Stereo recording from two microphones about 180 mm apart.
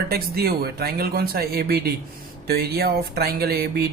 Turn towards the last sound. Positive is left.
turn(degrees=-60)  # may be behind; listen again after turning